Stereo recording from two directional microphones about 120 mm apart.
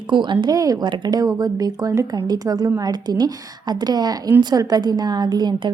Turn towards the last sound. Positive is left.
turn(degrees=-35)  # may be behind; listen again after turning